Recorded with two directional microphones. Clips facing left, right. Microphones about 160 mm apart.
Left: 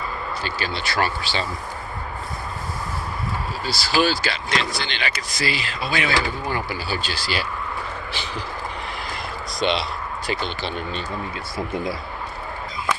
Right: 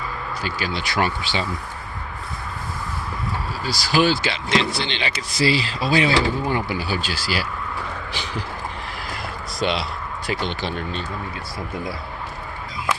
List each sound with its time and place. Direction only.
0.4 s speech: 10° right (ahead or behind)
3.7 s speech: 15° right (ahead or behind)
8.1 s a sound: 15° right (ahead or behind)
9.6 s speech: 5° right (ahead or behind)